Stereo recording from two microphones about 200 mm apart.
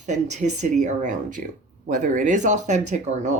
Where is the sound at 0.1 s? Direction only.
35° right (ahead or behind).